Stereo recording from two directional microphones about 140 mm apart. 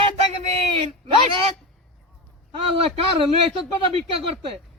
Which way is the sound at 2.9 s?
45° right (ahead or behind).